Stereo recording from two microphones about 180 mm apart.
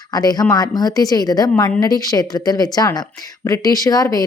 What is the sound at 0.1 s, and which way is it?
A woman's voice, 20° left (ahead or behind).